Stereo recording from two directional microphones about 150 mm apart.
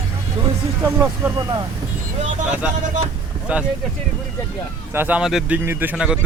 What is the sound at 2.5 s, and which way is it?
Speech, 10° right (ahead or behind).